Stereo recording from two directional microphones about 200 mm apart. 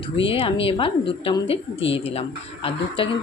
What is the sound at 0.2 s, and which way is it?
Speech, 25° left (ahead or behind).